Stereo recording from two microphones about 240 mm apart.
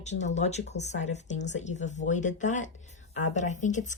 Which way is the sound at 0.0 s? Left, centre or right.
Left.